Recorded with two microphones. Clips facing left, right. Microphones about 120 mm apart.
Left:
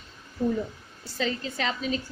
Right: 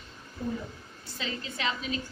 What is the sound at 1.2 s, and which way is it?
Speech, 40° left (ahead or behind).